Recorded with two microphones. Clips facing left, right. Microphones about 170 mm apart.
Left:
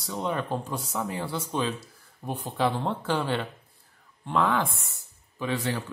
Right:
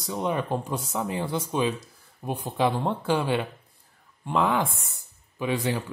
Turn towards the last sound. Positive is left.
turn(degrees=-15)  # may be behind; listen again after turning